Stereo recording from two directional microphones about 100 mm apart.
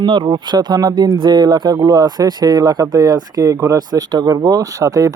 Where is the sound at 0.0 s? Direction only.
55° right (ahead or behind).